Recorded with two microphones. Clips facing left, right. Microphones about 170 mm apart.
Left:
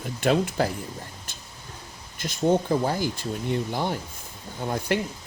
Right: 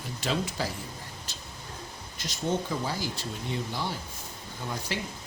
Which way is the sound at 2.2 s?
50° left (ahead or behind).